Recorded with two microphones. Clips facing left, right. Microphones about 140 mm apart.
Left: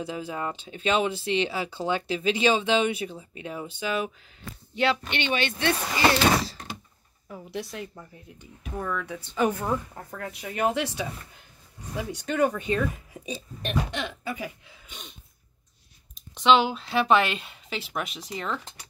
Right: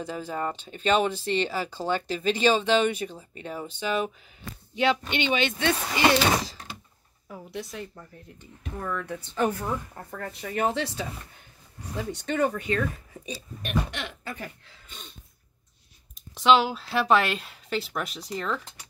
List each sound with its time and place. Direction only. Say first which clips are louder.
0.0 s speech: right 1 dB; 10° left (ahead or behind)
4.7 s speech: right 1 dB; 15° right (ahead or behind)
7.2 s speech: left 2 dB; centre (ahead or behind)
9.5 s a woman's voice: left 2 dB; 20° left (ahead or behind)
9.9 s speech: even; 5° left (ahead or behind)
12.0 s speech: left 1 dB; 10° left (ahead or behind)
12.5 s speech: left 1 dB; 20° left (ahead or behind); by 15.1 s 5° left (ahead or behind)
16.3 s speech: even; centre (ahead or behind)